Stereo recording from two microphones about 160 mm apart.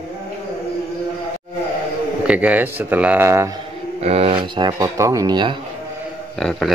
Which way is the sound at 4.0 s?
40° right (ahead or behind).